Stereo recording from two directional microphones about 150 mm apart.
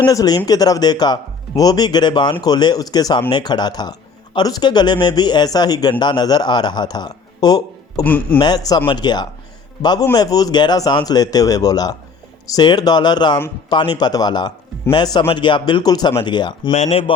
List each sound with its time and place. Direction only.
0.1 s a man's voice: 25° left (ahead or behind)
8.0 s speech: 10° left (ahead or behind)
8.4 s speech: 25° left (ahead or behind)
16.7 s speech: 40° left (ahead or behind)